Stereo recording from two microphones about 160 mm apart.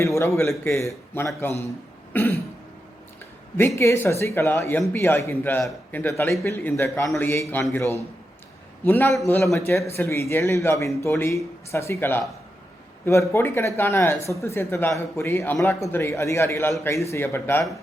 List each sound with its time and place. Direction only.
0.0 s speech: 20° left (ahead or behind)
3.8 s speech: 15° left (ahead or behind)
8.8 s speech: 15° left (ahead or behind)